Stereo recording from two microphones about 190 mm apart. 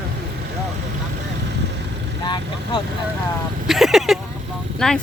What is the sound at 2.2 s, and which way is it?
Speech, 25° left (ahead or behind).